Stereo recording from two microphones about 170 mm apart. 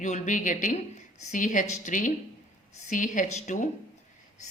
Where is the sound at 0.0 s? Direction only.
50° left (ahead or behind).